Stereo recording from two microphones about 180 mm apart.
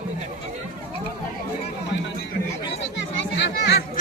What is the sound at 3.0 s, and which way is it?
Children playing, 80° left.